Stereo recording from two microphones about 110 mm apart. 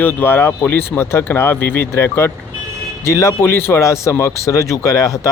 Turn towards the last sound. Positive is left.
turn(degrees=30)  # may be behind; listen again after turning